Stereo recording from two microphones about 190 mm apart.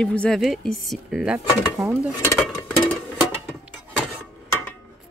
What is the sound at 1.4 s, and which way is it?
Speech, 25° left (ahead or behind).